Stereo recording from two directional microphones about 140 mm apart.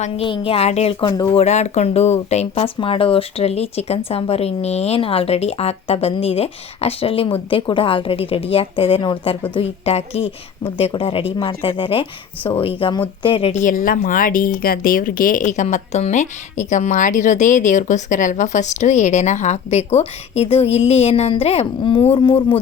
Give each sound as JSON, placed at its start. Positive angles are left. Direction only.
{"t": 0.3, "sound": "a woman's voice", "side_deg": 45}
{"t": 1.0, "sound": "speech", "side_deg": 30}
{"t": 1.3, "sound": "a woman's voice", "side_deg": 50}
{"t": 13.5, "sound": "speech", "side_deg": 65}